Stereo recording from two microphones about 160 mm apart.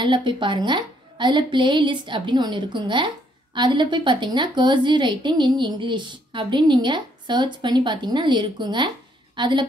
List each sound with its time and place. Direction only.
0.0 s a woman's voice: 30° right (ahead or behind)